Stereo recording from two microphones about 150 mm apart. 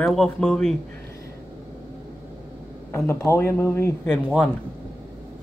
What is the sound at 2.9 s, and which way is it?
Speech, 15° left (ahead or behind).